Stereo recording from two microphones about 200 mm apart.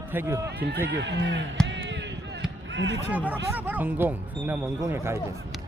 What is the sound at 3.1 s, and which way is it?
Speech, 10° right (ahead or behind).